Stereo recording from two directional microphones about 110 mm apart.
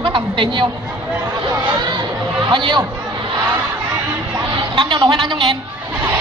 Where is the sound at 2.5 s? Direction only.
45° right (ahead or behind).